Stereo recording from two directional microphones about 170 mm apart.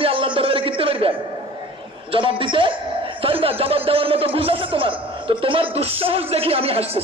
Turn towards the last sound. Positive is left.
turn(degrees=-35)  # may be behind; listen again after turning